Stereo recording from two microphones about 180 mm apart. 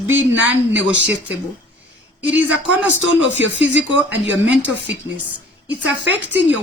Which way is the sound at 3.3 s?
90° right.